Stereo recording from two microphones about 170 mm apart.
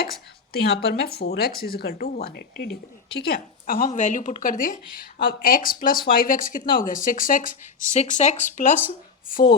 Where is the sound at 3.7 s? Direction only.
55° left (ahead or behind).